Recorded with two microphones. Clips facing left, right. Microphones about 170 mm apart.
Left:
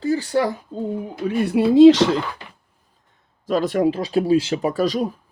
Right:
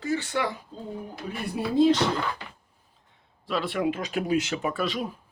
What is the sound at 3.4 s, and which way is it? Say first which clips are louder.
Speech: left 8 dB; 40° left (ahead or behind).